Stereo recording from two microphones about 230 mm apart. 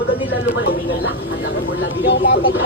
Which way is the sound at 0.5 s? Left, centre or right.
Left.